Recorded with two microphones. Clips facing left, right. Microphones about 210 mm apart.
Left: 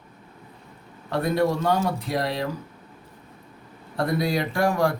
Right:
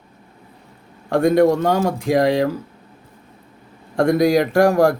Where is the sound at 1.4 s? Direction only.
45° right (ahead or behind).